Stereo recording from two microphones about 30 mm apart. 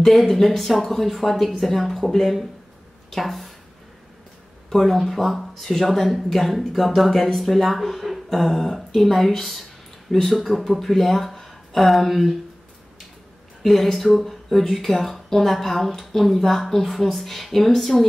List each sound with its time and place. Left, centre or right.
0.3 s a woman's voice: centre
4.6 s a woman's voice: centre
10.6 s a woman's voice: centre
11.3 s a sound: centre
13.6 s a woman's voice: centre